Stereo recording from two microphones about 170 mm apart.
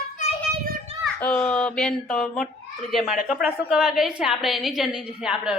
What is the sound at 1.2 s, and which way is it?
A woman's voice, 5° left (ahead or behind).